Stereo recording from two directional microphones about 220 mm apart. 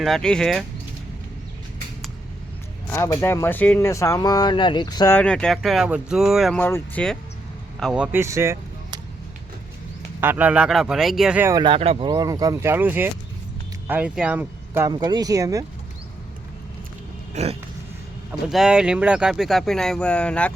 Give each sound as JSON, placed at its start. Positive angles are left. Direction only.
{"t": 0.0, "sound": "speech", "side_deg": 0}
{"t": 2.9, "sound": "speech", "side_deg": 10}
{"t": 10.2, "sound": "speech", "side_deg": -10}
{"t": 17.3, "sound": "a sound", "side_deg": -30}
{"t": 18.3, "sound": "speech", "side_deg": -5}